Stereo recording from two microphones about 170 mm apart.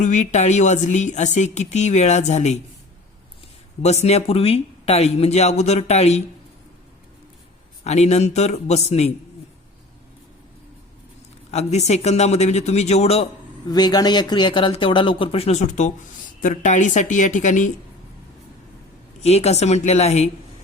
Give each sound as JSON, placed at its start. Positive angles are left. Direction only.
{"t": 0.0, "sound": "speech", "side_deg": 45}
{"t": 3.8, "sound": "speech", "side_deg": 40}
{"t": 7.9, "sound": "speech", "side_deg": 40}
{"t": 11.5, "sound": "speech", "side_deg": 40}
{"t": 13.7, "sound": "speech", "side_deg": 25}
{"t": 19.2, "sound": "speech", "side_deg": 40}